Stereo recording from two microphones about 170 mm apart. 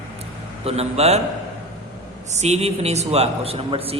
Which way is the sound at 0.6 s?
40° right (ahead or behind).